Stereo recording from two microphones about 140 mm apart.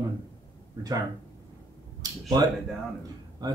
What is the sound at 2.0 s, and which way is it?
Speech, 25° right (ahead or behind).